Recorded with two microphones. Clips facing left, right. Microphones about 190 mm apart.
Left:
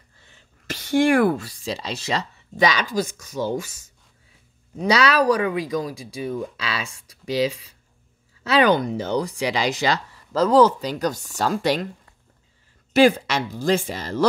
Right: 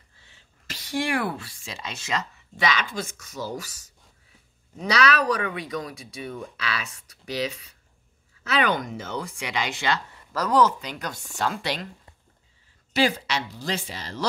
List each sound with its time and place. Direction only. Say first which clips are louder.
0.7 s speech: left 9 dB; 50° left (ahead or behind)
10.3 s speech: left 6 dB; 30° left (ahead or behind); by 11.9 s 45° left (ahead or behind)
12.9 s speech: left 7 dB; 50° left (ahead or behind)